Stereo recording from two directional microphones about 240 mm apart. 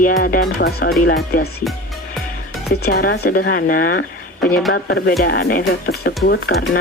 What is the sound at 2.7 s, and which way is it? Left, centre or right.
Speech, left.